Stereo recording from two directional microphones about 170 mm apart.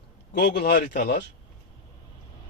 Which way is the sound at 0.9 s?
60° left (ahead or behind).